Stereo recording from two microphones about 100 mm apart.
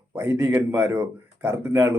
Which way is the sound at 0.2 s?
25° right (ahead or behind).